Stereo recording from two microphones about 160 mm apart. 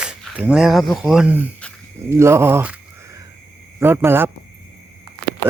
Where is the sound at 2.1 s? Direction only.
15° right (ahead or behind).